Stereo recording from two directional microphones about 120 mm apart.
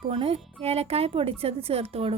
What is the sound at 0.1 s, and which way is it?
A woman's voice, 55° right (ahead or behind).